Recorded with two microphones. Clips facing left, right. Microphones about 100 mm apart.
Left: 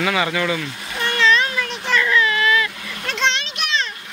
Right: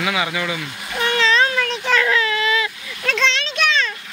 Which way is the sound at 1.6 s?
90° right.